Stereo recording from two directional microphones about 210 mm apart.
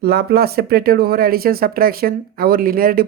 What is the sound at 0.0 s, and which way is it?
Speech, 45° right (ahead or behind).